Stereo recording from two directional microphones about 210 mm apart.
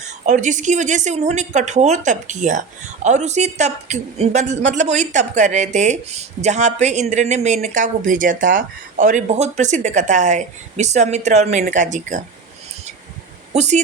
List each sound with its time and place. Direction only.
0.3 s speech: 35° right (ahead or behind)
13.5 s speech: 35° right (ahead or behind)